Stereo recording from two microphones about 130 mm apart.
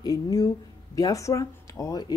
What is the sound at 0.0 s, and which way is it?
Speech, 30° left (ahead or behind).